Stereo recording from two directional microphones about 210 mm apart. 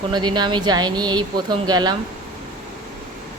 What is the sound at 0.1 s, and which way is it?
Speech, 20° right (ahead or behind).